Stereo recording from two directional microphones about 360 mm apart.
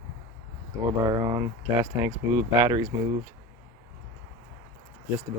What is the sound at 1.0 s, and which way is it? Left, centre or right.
Speech, centre.